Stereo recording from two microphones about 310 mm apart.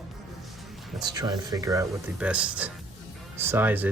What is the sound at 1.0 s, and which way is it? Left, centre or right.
Speech, centre.